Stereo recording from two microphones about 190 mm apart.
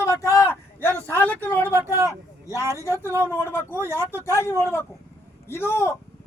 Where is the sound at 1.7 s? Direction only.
10° right (ahead or behind).